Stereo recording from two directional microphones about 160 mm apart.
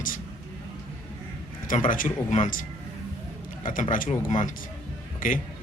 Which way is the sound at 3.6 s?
55° left (ahead or behind).